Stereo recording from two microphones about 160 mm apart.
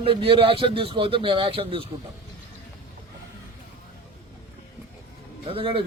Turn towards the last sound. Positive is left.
turn(degrees=-35)  # may be behind; listen again after turning